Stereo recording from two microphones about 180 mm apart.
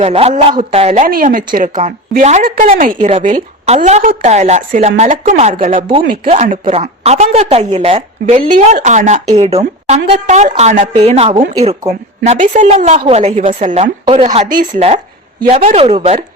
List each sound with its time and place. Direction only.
0.0 s a woman's voice: 35° right (ahead or behind)
1.0 s a woman's voice: 50° right (ahead or behind)
14.0 s a woman's voice: 30° right (ahead or behind)